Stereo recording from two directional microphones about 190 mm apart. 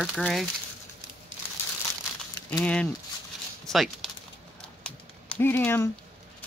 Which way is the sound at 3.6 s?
Centre (ahead or behind).